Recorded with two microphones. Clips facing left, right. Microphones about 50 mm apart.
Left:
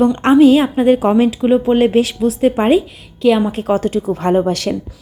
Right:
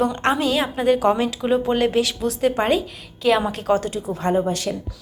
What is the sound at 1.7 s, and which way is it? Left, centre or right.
A woman's voice, left.